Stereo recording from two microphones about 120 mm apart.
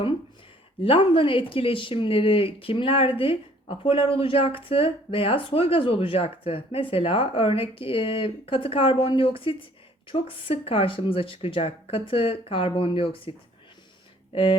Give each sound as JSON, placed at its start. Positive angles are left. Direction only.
{"t": 0.8, "sound": "speech", "side_deg": 45}